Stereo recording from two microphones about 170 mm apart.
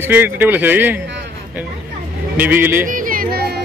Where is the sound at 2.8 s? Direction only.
55° right (ahead or behind).